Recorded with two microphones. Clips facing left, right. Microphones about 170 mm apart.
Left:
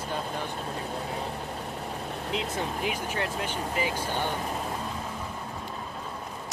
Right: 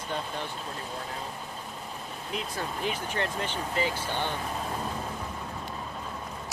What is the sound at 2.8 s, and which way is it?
Speech, 10° left (ahead or behind).